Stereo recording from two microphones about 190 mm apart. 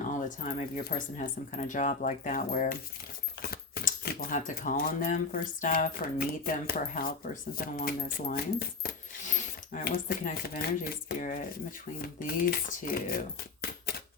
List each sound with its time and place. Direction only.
0.1 s speech: 40° left (ahead or behind)
8.3 s coin: 50° left (ahead or behind)
12.0 s speech: 50° left (ahead or behind)